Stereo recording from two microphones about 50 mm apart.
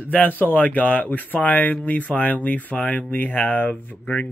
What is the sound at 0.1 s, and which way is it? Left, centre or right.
Speech, left.